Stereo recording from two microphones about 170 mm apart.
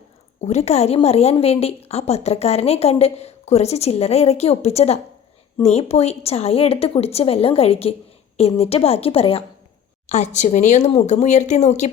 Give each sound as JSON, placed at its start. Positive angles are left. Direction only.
{"t": 0.4, "sound": "a woman's voice", "side_deg": 40}